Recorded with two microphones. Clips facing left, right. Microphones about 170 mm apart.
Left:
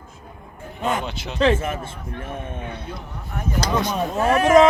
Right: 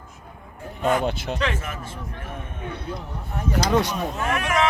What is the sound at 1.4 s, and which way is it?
Speech, 30° left (ahead or behind).